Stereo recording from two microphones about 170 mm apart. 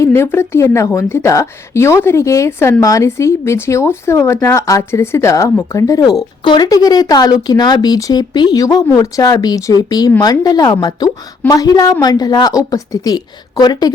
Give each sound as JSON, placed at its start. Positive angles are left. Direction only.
{"t": 0.0, "sound": "a woman's voice", "side_deg": 15}